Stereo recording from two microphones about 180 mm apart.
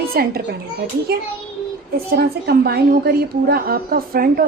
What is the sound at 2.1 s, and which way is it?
A woman's voice, 60° right (ahead or behind).